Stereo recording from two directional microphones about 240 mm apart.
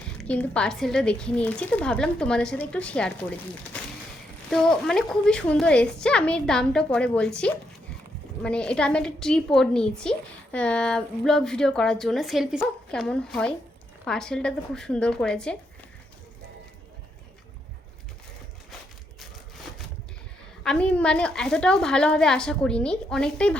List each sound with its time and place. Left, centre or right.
0.2 s speech: centre
20.7 s speech: centre